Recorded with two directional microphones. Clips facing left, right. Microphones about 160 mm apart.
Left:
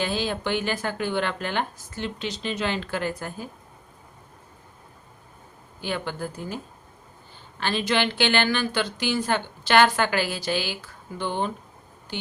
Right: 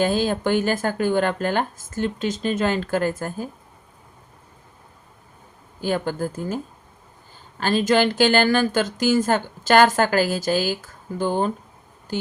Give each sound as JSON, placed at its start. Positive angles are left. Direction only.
{"t": 0.0, "sound": "a woman's voice", "side_deg": -45}
{"t": 5.8, "sound": "a woman's voice", "side_deg": -45}
{"t": 7.6, "sound": "a woman's voice", "side_deg": -40}